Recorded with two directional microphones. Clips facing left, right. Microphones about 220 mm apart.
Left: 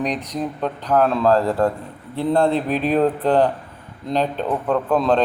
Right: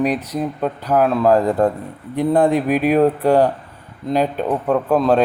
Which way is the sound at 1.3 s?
15° right (ahead or behind).